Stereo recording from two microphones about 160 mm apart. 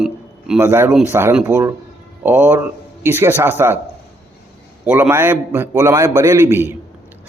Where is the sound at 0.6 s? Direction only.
15° right (ahead or behind).